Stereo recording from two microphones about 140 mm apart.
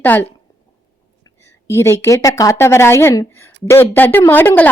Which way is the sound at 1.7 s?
20° left (ahead or behind).